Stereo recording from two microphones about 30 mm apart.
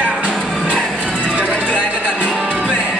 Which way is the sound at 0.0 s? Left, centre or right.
Right.